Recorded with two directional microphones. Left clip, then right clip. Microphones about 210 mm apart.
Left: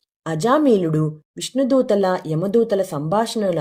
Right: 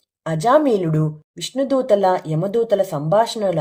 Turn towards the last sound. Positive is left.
turn(degrees=45)  # may be behind; listen again after turning